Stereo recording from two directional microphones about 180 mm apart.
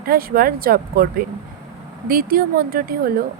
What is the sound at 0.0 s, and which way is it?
Speech, 55° right (ahead or behind).